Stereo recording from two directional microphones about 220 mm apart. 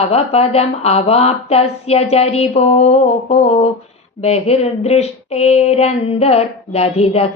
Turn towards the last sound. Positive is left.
turn(degrees=25)  # may be behind; listen again after turning